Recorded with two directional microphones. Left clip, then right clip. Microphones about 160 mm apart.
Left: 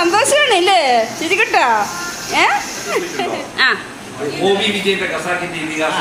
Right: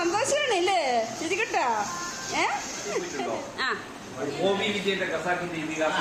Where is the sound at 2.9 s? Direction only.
35° left (ahead or behind).